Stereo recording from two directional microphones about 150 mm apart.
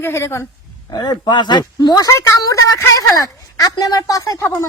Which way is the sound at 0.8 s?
30° left (ahead or behind).